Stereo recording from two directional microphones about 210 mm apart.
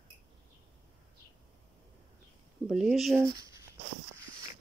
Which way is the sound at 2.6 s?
Centre (ahead or behind).